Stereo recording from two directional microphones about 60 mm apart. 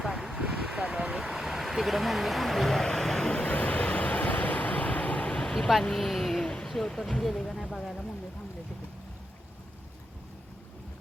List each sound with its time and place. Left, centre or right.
0.0 s vehicle: centre
0.4 s vehicle: centre
1.2 s speech: centre
3.3 s vehicle: left
5.5 s speech: centre
6.4 s a sound: centre